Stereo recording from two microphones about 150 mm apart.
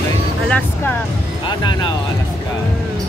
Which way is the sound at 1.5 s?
30° left (ahead or behind).